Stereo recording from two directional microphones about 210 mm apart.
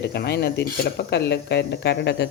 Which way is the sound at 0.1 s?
50° left (ahead or behind).